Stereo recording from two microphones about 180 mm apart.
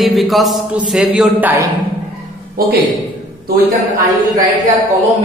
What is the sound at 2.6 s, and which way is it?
Speech, 55° right (ahead or behind).